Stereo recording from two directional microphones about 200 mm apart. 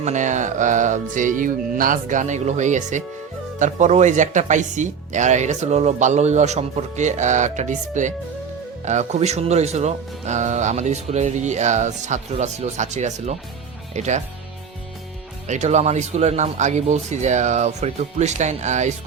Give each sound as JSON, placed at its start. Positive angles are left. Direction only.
{"t": 0.0, "sound": "speech", "side_deg": -35}
{"t": 15.4, "sound": "speech", "side_deg": -35}